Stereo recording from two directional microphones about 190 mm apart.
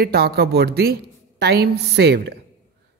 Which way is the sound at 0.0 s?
55° right (ahead or behind).